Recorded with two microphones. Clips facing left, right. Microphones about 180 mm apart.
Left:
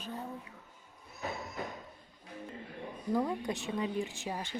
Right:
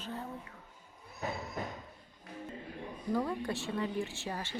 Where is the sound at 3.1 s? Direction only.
15° left (ahead or behind).